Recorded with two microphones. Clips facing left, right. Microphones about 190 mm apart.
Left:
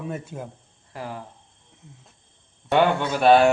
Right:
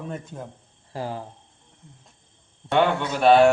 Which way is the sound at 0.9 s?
30° right (ahead or behind).